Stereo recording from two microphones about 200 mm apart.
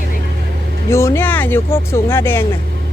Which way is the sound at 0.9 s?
15° left (ahead or behind).